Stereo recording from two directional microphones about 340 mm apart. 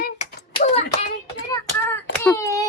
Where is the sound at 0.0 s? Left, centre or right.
Centre.